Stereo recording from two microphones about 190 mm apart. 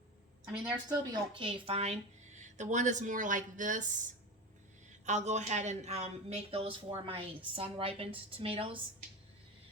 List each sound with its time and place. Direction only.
0.4 s a woman's voice: 5° right (ahead or behind)
0.9 s speech: 20° right (ahead or behind); by 3.8 s 45° right (ahead or behind)
5.0 s speech: 40° right (ahead or behind)